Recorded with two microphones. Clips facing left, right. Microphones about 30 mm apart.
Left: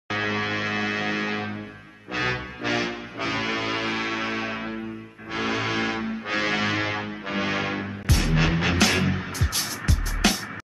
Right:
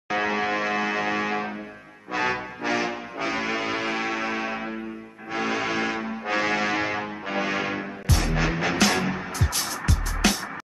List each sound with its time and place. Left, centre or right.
0.1 s music: centre
8.4 s music: centre
8.7 s music: centre